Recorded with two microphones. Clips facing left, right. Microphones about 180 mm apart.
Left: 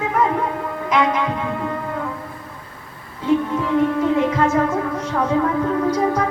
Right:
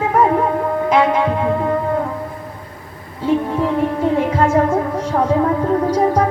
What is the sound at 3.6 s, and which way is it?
Music, 35° right (ahead or behind).